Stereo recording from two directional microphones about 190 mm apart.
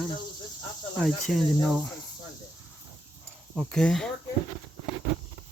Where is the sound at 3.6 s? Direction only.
5° left (ahead or behind).